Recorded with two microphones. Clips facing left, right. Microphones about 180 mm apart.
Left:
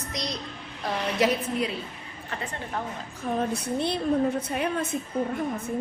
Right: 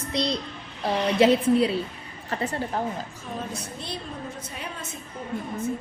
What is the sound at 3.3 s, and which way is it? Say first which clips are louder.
Speech: left 8 dB; 55° left (ahead or behind).